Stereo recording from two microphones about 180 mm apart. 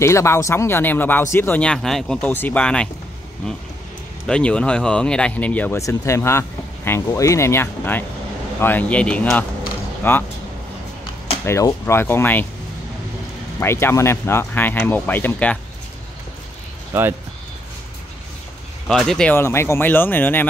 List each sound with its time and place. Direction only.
0.0 s speech: 15° left (ahead or behind)
11.4 s speech: 15° left (ahead or behind)
13.6 s speech: 15° left (ahead or behind)
18.9 s speech: centre (ahead or behind)